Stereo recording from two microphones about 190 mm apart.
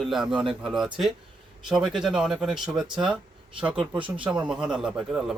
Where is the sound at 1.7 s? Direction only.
Centre (ahead or behind).